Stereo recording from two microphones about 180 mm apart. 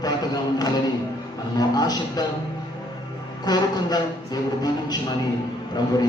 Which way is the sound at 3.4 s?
20° left (ahead or behind).